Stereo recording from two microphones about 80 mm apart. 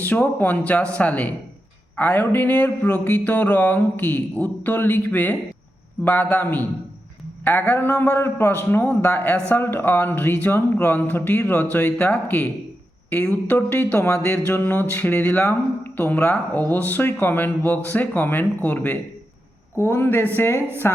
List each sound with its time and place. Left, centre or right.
0.0 s a woman's voice: left